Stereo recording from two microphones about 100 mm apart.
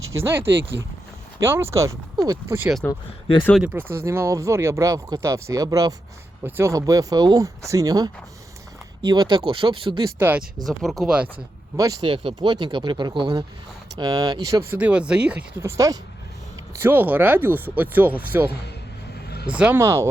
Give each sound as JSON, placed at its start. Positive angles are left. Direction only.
{"t": 0.0, "sound": "speech", "side_deg": -25}
{"t": 2.8, "sound": "speech", "side_deg": 10}
{"t": 3.6, "sound": "speech", "side_deg": -10}
{"t": 3.8, "sound": "speech", "side_deg": -25}
{"t": 6.4, "sound": "speech", "side_deg": -25}
{"t": 6.7, "sound": "speech", "side_deg": -35}
{"t": 10.2, "sound": "speech", "side_deg": -20}
{"t": 10.7, "sound": "speech", "side_deg": 0}
{"t": 11.8, "sound": "speech", "side_deg": -35}
{"t": 12.0, "sound": "speech", "side_deg": -55}
{"t": 14.7, "sound": "speech", "side_deg": -15}
{"t": 15.6, "sound": "speech", "side_deg": -35}
{"t": 16.8, "sound": "speech", "side_deg": -20}
{"t": 19.8, "sound": "speech", "side_deg": -25}